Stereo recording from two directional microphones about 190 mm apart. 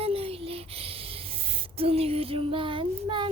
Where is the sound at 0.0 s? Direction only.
30° right (ahead or behind).